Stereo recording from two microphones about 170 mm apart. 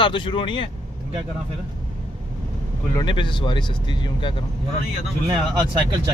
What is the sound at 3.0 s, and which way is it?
Speech, 30° left (ahead or behind).